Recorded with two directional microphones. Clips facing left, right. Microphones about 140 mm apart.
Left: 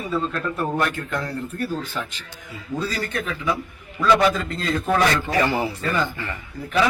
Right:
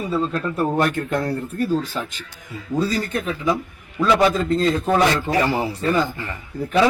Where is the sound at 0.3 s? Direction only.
35° right (ahead or behind).